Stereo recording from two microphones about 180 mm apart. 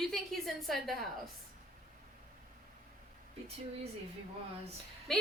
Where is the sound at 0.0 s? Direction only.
Centre (ahead or behind).